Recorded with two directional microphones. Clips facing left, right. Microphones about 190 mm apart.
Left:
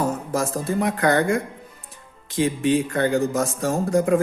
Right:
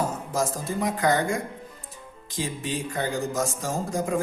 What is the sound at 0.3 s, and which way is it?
Speech, 60° left (ahead or behind).